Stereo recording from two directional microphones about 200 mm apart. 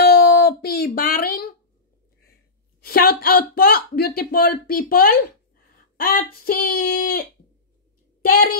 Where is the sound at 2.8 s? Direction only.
50° left (ahead or behind).